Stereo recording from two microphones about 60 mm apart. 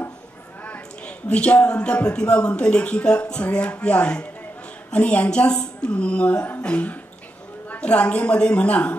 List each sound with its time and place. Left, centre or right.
0.7 s speech: centre